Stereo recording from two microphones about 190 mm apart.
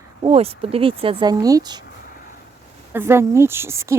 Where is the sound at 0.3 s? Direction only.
30° right (ahead or behind).